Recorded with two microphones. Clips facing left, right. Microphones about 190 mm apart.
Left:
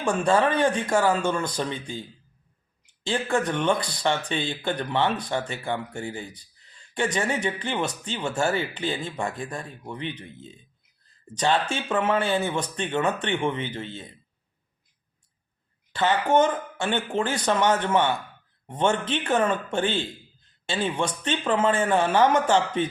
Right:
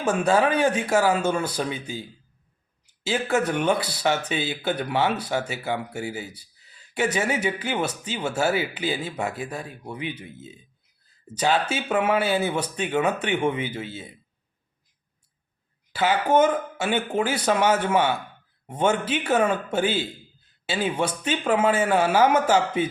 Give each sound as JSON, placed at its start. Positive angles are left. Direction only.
{"t": 0.0, "sound": "speech", "side_deg": -5}
{"t": 15.9, "sound": "speech", "side_deg": -10}